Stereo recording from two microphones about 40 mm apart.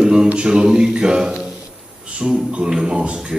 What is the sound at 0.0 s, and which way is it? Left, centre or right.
A man's voice, right.